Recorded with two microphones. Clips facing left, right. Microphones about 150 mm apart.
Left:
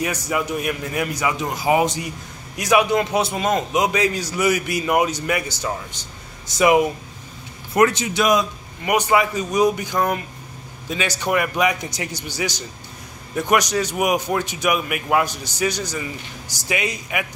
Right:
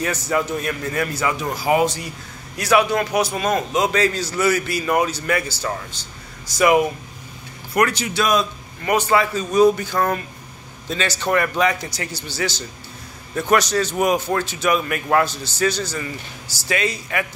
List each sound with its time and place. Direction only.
0.0 s a man's voice: 10° left (ahead or behind)